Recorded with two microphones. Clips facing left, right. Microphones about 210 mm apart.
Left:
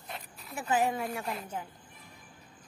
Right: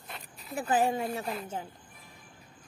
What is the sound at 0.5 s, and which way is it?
A woman's voice, 30° right (ahead or behind).